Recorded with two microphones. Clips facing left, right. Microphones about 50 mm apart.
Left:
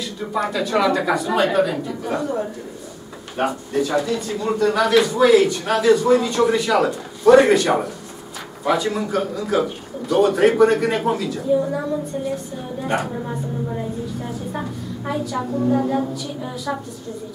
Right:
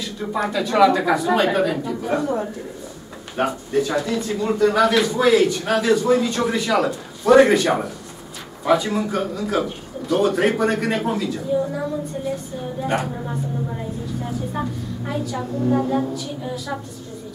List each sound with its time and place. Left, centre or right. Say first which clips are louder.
0.0 s a man's voice: even; centre
12.8 s a man's voice: left 1 dB; centre